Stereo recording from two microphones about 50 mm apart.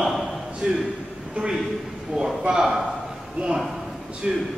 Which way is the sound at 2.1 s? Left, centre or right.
Centre.